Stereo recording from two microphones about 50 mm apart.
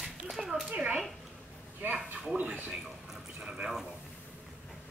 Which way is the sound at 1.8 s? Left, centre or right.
Right.